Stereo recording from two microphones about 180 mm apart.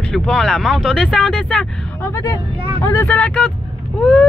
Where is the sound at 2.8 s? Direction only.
15° left (ahead or behind).